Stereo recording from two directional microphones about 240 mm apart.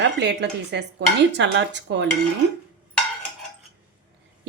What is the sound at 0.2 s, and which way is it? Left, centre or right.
A woman's voice, right.